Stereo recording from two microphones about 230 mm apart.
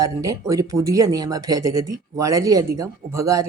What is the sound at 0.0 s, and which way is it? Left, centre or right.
Speech, centre.